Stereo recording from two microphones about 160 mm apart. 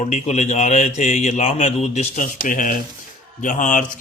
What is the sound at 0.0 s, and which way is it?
Speech, 45° left (ahead or behind).